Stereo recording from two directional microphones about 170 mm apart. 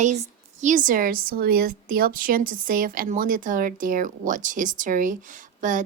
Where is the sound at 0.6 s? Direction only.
50° right (ahead or behind).